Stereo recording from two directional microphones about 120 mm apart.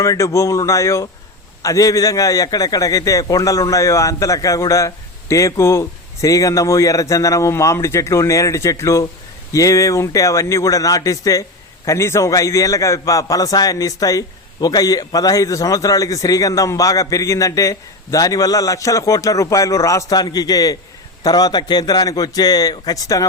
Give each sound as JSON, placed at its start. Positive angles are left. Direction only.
{"t": 0.0, "sound": "a man's voice", "side_deg": 25}